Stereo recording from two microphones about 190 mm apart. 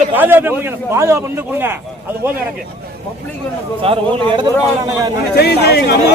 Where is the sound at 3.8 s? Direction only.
30° right (ahead or behind).